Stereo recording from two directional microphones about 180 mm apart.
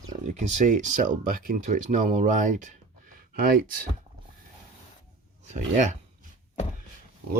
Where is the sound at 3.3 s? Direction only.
55° right (ahead or behind).